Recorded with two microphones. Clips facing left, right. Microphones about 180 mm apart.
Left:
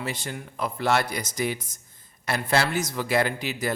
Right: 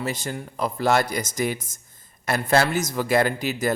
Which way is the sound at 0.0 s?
40° right (ahead or behind).